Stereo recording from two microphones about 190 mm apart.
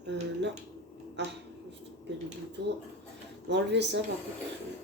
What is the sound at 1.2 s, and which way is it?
Speech, 65° right (ahead or behind).